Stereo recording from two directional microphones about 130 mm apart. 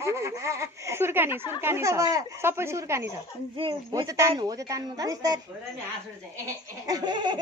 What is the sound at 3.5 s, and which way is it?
Speech, 40° right (ahead or behind).